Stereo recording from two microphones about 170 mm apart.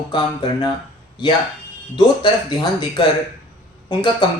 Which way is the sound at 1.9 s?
25° left (ahead or behind).